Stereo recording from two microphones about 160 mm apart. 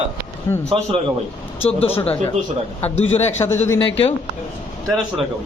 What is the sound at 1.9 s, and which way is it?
Speech, 10° left (ahead or behind).